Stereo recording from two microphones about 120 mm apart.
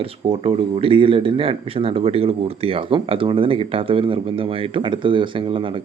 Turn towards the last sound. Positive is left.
turn(degrees=-45)  # may be behind; listen again after turning